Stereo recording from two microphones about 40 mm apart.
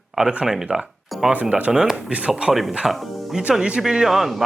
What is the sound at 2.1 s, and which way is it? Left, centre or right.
Speech, right.